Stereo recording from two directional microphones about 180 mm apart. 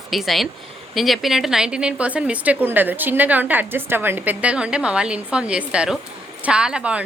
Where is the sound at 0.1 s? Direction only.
Centre (ahead or behind).